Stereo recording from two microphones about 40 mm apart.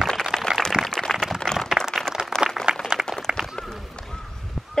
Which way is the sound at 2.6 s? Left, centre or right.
Centre.